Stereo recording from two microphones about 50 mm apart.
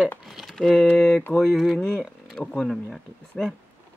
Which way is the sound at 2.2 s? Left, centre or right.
Centre.